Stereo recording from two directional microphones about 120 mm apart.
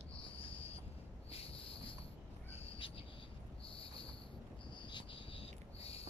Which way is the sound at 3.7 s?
50° left (ahead or behind).